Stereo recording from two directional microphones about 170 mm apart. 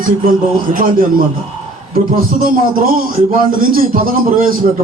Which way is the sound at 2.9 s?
55° right (ahead or behind).